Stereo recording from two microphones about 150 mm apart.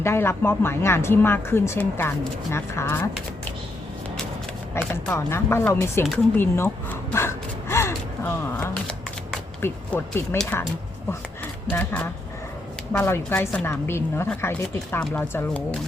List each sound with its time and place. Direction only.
0.0 s speech: 15° left (ahead or behind)
4.7 s speech: 15° left (ahead or behind)
6.3 s gasp: 15° left (ahead or behind)
8.7 s shuffling cards: 5° left (ahead or behind)
9.6 s speech: 15° left (ahead or behind)
11.7 s speech: 10° left (ahead or behind)